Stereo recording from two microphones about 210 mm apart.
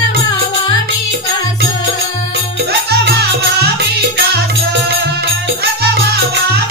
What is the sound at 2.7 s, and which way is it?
Music, 50° right (ahead or behind).